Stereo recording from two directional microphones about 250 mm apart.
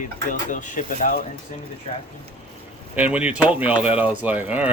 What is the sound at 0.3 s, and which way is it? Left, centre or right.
Speech, left.